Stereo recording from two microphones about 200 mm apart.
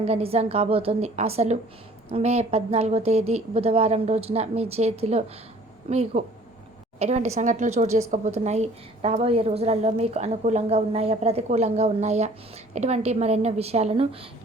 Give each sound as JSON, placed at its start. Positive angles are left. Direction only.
{"t": 0.0, "sound": "a woman's voice", "side_deg": -30}